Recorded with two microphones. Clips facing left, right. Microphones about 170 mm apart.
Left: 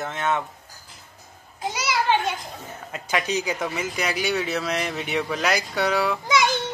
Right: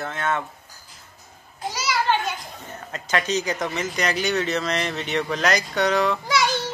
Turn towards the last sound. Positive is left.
turn(degrees=20)  # may be behind; listen again after turning